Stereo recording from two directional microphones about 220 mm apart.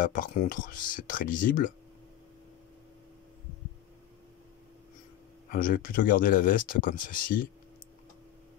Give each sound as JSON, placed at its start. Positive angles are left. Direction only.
{"t": 0.0, "sound": "speech", "side_deg": 35}
{"t": 5.5, "sound": "speech", "side_deg": 40}